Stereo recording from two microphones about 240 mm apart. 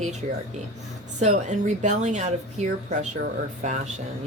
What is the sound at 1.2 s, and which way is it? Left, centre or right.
Speech, right.